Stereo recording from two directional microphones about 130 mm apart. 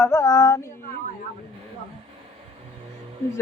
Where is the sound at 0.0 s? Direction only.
20° left (ahead or behind).